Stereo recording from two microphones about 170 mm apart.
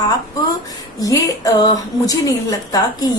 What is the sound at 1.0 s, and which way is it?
A woman's voice, 20° left (ahead or behind).